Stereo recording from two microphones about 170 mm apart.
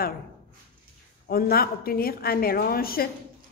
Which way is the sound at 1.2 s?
60° left (ahead or behind).